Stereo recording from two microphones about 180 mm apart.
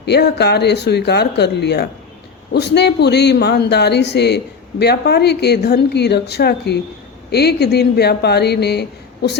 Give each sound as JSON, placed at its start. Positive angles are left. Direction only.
{"t": 0.0, "sound": "speech", "side_deg": 65}